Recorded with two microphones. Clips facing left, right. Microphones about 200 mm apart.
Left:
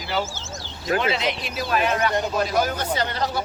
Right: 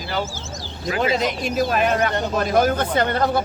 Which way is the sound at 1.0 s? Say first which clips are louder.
Right 4 dB; 45° right (ahead or behind).